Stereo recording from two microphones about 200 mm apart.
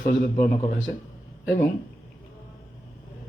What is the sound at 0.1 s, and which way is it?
Speech, 40° left (ahead or behind).